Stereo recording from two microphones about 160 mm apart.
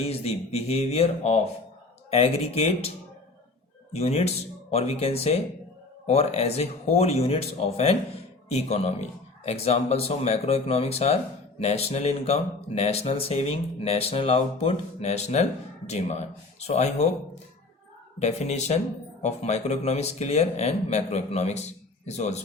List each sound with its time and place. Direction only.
0.0 s speech: 40° left (ahead or behind)
3.9 s speech: 45° left (ahead or behind)
18.2 s speech: 45° left (ahead or behind)